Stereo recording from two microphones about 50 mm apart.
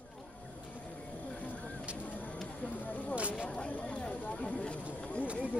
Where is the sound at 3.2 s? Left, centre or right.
Right.